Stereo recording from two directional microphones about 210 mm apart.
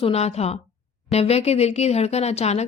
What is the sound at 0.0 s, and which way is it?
A woman's voice, 30° left (ahead or behind).